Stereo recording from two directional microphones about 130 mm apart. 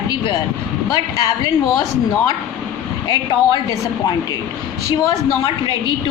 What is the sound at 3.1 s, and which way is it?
A woman's voice, 35° left (ahead or behind).